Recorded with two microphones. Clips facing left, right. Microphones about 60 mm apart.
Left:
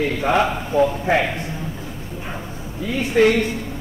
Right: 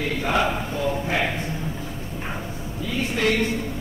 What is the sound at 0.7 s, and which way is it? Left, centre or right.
Speech, left.